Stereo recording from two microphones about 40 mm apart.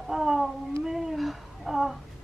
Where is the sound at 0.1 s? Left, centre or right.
Centre.